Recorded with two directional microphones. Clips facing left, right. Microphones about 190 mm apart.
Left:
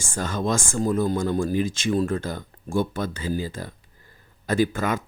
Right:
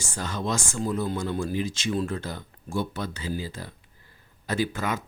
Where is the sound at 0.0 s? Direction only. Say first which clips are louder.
Left 4 dB; 50° left (ahead or behind).